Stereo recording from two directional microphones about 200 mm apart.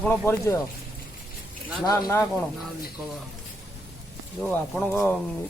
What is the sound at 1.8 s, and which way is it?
Speech, 20° left (ahead or behind).